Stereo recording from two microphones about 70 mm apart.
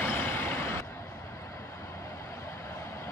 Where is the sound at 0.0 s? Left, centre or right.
Left.